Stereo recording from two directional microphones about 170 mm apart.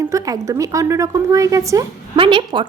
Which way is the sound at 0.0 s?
20° right (ahead or behind).